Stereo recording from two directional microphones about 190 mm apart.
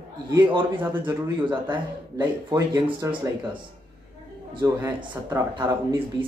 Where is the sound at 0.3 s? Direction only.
25° right (ahead or behind).